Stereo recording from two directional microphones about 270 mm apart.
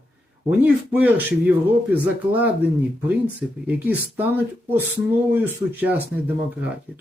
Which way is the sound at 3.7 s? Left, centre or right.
Centre.